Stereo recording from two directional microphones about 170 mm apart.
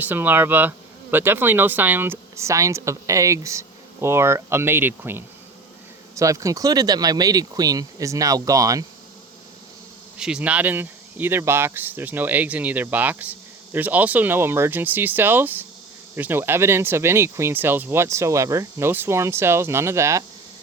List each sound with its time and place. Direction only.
0.0 s speech: 10° right (ahead or behind)
10.2 s speech: 5° right (ahead or behind)